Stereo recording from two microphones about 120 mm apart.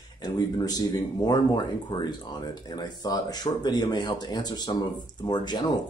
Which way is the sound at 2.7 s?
35° left (ahead or behind).